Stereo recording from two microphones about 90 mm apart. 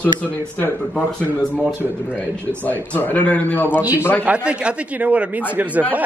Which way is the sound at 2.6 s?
20° left (ahead or behind).